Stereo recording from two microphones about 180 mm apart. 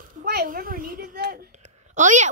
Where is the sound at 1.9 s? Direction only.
45° right (ahead or behind).